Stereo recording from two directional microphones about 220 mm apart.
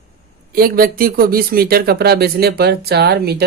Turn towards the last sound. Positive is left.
turn(degrees=-45)  # may be behind; listen again after turning